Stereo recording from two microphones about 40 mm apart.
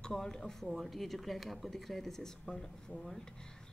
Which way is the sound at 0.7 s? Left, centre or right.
Centre.